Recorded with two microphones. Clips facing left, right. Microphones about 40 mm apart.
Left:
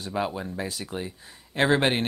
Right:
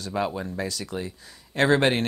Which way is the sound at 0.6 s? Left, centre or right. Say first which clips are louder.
Right 2 dB; left.